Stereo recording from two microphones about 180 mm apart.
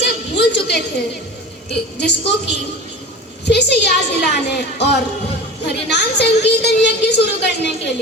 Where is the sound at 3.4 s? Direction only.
65° left (ahead or behind).